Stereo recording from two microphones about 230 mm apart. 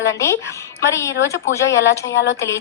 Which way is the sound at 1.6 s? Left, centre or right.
Left.